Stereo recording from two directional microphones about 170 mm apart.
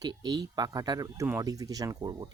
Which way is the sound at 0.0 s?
25° right (ahead or behind).